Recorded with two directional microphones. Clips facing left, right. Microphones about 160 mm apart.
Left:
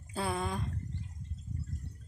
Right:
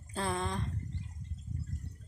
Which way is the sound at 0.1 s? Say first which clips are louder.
Even; 5° left (ahead or behind).